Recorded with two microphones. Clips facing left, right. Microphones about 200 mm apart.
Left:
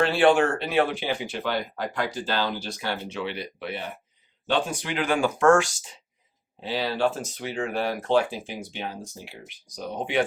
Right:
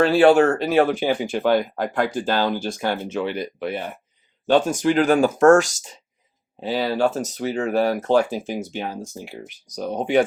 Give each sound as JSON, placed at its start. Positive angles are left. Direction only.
{"t": 0.0, "sound": "speech", "side_deg": -40}